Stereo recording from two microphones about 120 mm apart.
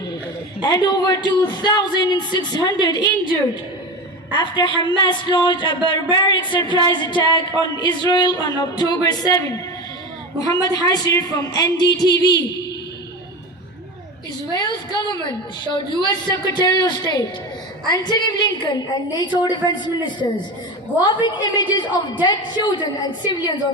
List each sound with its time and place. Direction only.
0.6 s speech: 35° left (ahead or behind)
4.3 s speech: 40° left (ahead or behind)
14.5 s speech: 35° left (ahead or behind)